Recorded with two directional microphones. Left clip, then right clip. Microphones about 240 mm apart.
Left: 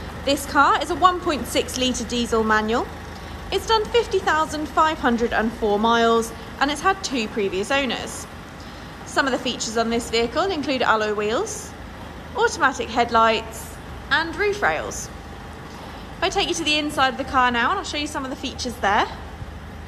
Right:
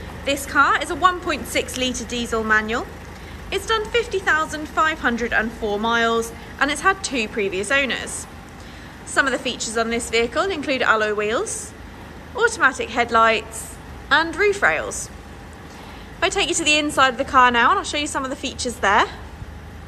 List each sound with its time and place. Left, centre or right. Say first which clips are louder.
0.2 s a woman's voice: even; centre
9.1 s a woman's voice: right 2 dB; centre
16.2 s a woman's voice: right 2 dB; centre